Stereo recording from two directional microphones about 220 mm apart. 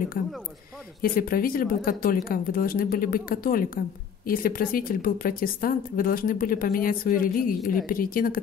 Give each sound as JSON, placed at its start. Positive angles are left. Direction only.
{"t": 0.2, "sound": "speech", "side_deg": 40}